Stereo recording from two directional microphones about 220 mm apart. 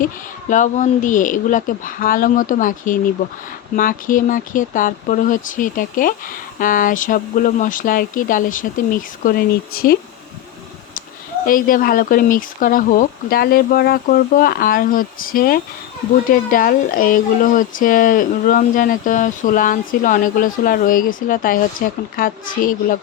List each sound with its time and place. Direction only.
0.5 s speech: 35° left (ahead or behind)
11.4 s speech: 40° left (ahead or behind)